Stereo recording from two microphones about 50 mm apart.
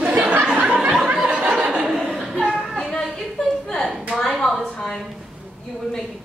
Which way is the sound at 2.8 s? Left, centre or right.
Centre.